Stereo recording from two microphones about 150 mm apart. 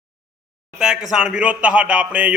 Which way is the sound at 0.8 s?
5° right (ahead or behind).